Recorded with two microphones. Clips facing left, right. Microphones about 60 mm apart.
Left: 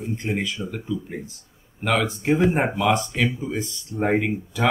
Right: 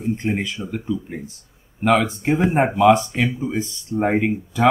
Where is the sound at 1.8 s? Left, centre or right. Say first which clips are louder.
Right 4 dB; right; by 4.2 s centre.